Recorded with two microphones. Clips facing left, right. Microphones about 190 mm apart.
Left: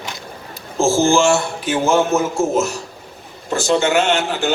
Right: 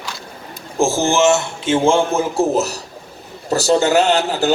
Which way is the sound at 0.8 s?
15° right (ahead or behind).